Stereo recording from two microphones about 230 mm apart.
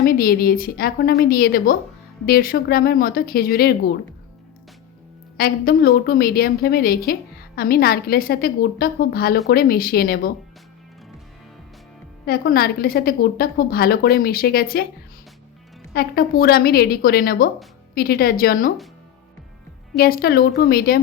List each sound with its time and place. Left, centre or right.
0.0 s a woman's voice: left
5.4 s a woman's voice: left
12.2 s a woman's voice: left
15.9 s a woman's voice: left
20.0 s a woman's voice: left